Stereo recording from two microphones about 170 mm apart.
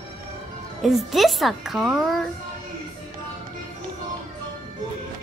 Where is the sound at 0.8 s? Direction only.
Centre (ahead or behind).